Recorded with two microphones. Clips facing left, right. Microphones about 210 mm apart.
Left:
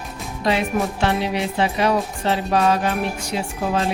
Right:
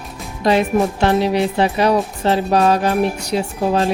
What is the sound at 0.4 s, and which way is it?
Speech, 40° right (ahead or behind).